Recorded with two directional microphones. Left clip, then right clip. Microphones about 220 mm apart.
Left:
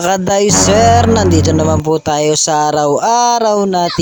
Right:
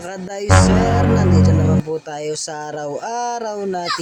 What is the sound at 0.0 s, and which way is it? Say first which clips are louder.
Speech: left 15 dB; 40° left (ahead or behind).